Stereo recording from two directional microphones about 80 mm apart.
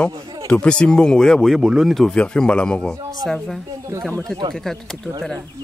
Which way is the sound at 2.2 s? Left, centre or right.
Centre.